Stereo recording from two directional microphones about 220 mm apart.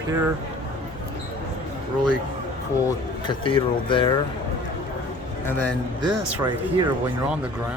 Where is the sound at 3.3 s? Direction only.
20° left (ahead or behind).